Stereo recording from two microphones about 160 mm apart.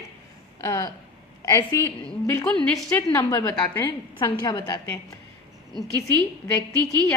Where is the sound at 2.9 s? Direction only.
15° left (ahead or behind).